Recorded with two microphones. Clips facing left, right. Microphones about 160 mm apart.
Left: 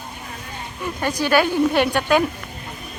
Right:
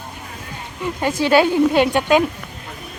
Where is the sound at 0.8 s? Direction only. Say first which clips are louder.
Right 3 dB; 20° right (ahead or behind).